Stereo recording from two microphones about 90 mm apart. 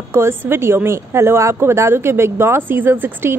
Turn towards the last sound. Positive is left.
turn(degrees=-25)  # may be behind; listen again after turning